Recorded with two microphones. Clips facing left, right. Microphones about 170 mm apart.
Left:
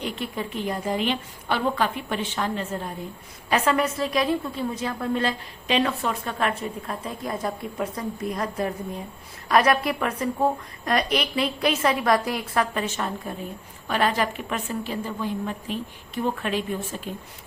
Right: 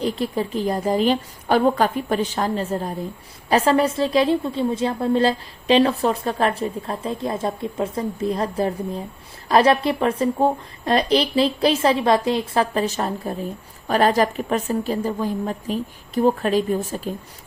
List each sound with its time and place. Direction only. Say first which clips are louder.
0.0 s a woman's voice: right 7 dB; 35° right (ahead or behind)